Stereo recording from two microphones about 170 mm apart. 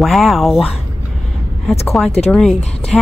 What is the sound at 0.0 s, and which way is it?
Speech, centre (ahead or behind).